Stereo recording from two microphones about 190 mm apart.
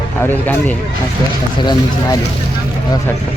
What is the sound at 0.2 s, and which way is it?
Speech, 10° left (ahead or behind).